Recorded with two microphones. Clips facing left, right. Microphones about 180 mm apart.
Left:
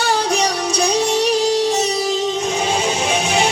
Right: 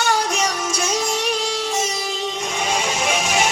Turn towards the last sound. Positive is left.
turn(degrees=35)  # may be behind; listen again after turning